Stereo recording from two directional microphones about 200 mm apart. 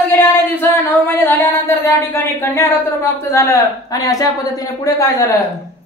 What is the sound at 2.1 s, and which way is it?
A woman's voice, 10° left (ahead or behind).